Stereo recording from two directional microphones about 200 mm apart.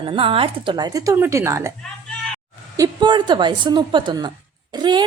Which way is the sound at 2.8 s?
20° right (ahead or behind).